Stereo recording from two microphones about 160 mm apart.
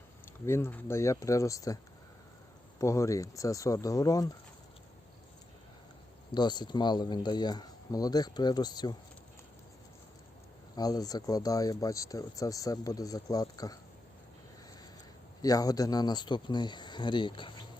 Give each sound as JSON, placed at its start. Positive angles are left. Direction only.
{"t": 0.4, "sound": "speech", "side_deg": 15}
{"t": 6.3, "sound": "speech", "side_deg": 25}
{"t": 10.8, "sound": "speech", "side_deg": 25}
{"t": 15.4, "sound": "speech", "side_deg": 20}